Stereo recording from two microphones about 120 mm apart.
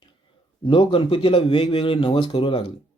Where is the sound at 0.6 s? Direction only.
45° left (ahead or behind).